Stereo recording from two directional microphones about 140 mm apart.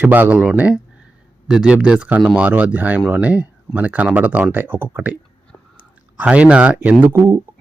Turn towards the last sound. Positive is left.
turn(degrees=-20)  # may be behind; listen again after turning